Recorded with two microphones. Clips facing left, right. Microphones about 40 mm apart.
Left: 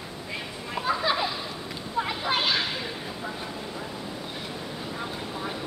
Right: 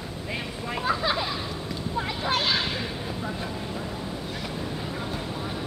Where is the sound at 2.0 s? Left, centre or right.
Centre.